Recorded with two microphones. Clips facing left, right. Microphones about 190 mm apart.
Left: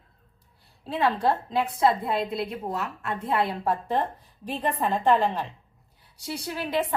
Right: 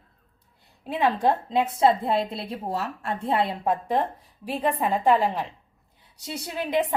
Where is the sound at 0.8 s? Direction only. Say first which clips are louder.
Right 1 dB; 15° right (ahead or behind).